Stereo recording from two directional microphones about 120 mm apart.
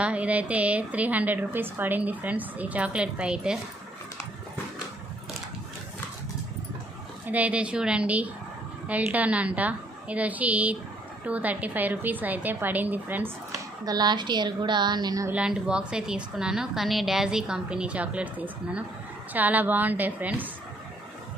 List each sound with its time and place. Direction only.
0.0 s speech: 10° right (ahead or behind)
7.3 s speech: 10° right (ahead or behind)
13.8 s a woman's voice: 35° right (ahead or behind)
15.3 s speech: 10° right (ahead or behind)